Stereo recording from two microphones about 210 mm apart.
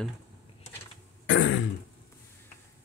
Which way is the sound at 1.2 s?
60° left (ahead or behind).